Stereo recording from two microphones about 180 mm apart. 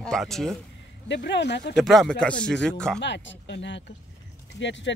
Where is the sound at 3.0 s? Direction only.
75° left (ahead or behind).